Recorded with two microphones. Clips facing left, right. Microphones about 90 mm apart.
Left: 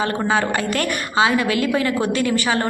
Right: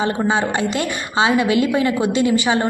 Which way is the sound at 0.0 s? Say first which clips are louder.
Right 1 dB; 20° right (ahead or behind).